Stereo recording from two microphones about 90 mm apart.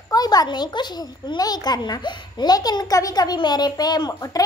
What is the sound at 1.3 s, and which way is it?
A child's voice, 50° left (ahead or behind).